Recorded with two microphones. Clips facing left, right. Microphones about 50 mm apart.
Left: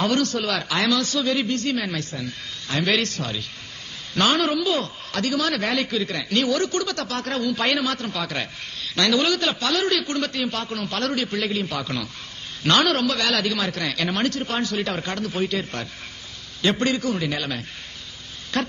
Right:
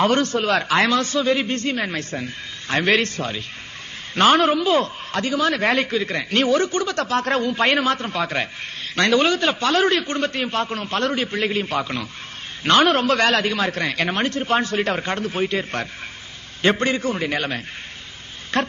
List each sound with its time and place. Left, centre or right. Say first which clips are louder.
0.0 s a man's voice: right 3 dB; right